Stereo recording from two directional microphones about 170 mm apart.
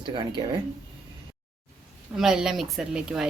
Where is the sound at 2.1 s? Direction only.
5° right (ahead or behind).